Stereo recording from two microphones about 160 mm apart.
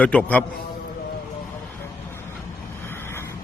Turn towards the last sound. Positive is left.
turn(degrees=15)  # may be behind; listen again after turning